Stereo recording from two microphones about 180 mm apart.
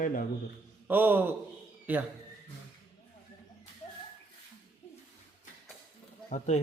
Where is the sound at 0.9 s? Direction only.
10° right (ahead or behind).